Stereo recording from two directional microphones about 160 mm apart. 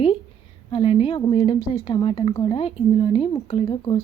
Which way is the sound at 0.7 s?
35° left (ahead or behind).